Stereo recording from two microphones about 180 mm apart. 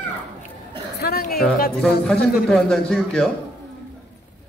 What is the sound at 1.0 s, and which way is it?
Speech, 55° left (ahead or behind).